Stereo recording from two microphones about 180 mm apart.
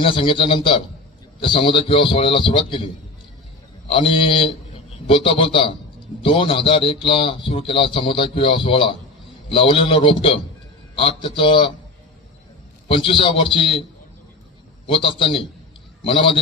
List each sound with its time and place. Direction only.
0.0 s a man's voice: 30° left (ahead or behind)
12.8 s a man's voice: 30° left (ahead or behind)
14.9 s a man's voice: 30° left (ahead or behind)